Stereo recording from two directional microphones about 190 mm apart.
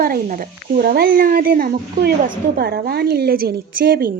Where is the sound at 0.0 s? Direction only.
50° right (ahead or behind).